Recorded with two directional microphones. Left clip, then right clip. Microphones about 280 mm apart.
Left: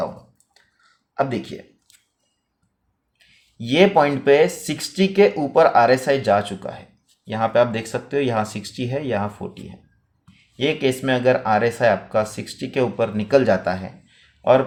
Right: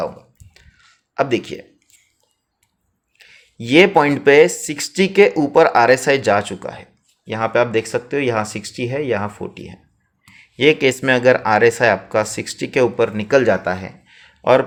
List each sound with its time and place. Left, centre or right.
1.1 s speech: right
3.2 s speech: right